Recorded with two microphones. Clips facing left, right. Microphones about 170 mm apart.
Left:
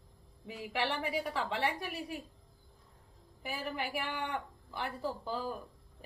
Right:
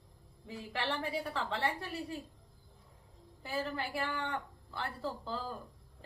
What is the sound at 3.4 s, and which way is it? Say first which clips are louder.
A woman's voice: right 1 dB; 15° left (ahead or behind).